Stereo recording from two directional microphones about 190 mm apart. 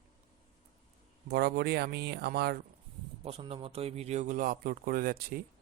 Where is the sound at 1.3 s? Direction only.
60° right (ahead or behind).